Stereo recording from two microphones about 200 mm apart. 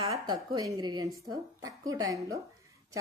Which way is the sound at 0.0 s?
20° right (ahead or behind).